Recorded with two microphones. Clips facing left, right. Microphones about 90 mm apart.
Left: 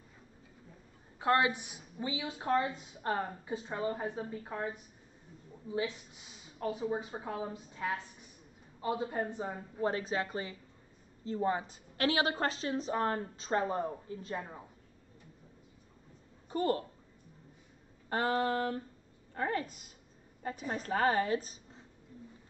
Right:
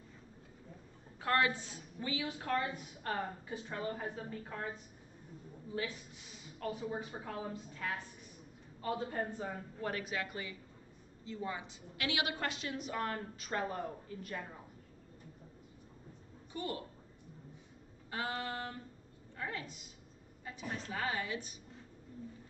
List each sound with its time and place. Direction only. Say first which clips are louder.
1.2 s a woman's voice: left 4 dB; 20° left (ahead or behind)
5.7 s a woman's voice: left 5 dB; 20° left (ahead or behind)
11.2 s a woman's voice: left 9 dB; 40° left (ahead or behind); by 14.6 s 25° left (ahead or behind)
16.5 s a woman's voice: left 9 dB; 45° left (ahead or behind)
18.1 s a woman's voice: left 9 dB; 50° left (ahead or behind)